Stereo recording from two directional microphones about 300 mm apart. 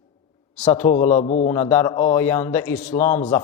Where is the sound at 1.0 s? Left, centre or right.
Centre.